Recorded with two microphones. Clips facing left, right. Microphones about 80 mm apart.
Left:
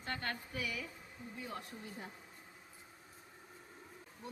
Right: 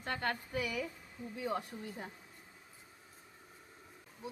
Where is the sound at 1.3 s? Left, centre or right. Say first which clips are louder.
Right 9 dB; right.